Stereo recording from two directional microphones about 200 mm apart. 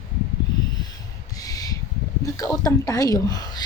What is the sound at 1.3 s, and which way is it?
Owl, 15° left (ahead or behind).